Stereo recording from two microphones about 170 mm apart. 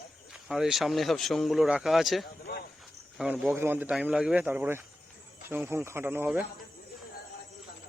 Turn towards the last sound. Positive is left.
turn(degrees=-10)  # may be behind; listen again after turning